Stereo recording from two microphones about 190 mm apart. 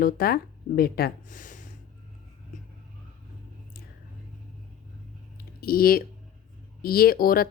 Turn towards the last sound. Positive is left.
turn(degrees=50)  # may be behind; listen again after turning